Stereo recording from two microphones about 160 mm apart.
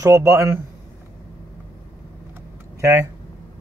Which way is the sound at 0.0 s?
20° right (ahead or behind).